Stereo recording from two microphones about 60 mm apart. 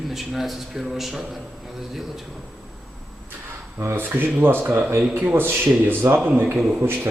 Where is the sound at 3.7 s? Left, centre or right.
Right.